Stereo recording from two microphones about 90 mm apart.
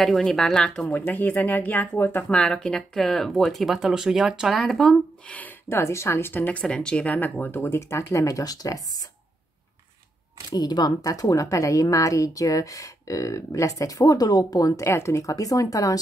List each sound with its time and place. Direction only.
0.0 s speech: 5° left (ahead or behind); by 2.2 s 25° left (ahead or behind)
2.2 s speech: 10° left (ahead or behind); by 4.6 s 5° right (ahead or behind)
4.6 s speech: 5° left (ahead or behind)
5.3 s a sound: 20° left (ahead or behind)
5.8 s speech: 30° left (ahead or behind)
10.5 s speech: 45° left (ahead or behind)